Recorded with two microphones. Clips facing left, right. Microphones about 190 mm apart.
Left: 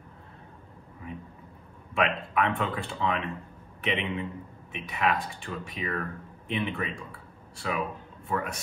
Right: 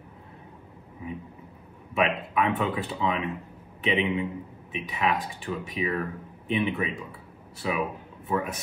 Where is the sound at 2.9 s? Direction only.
15° right (ahead or behind).